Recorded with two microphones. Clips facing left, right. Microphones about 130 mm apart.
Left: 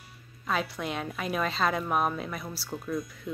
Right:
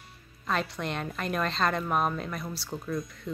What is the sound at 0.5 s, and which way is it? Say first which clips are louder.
A woman's voice: even; 5° left (ahead or behind).